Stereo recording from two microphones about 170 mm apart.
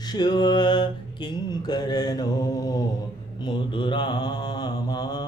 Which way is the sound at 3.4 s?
25° left (ahead or behind).